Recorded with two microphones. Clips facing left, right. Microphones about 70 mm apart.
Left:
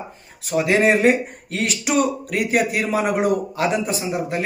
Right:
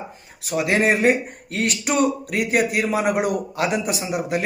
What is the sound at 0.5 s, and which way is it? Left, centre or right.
Speech, centre.